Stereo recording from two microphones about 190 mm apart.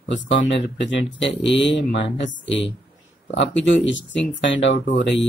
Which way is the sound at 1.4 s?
70° left (ahead or behind).